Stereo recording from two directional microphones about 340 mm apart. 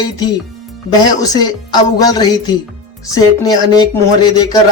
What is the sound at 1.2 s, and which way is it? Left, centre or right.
A man's voice, centre.